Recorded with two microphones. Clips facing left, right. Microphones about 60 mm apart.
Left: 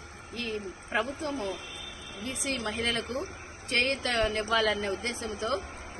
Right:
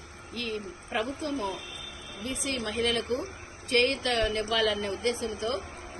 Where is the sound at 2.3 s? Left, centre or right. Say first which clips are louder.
Even; left.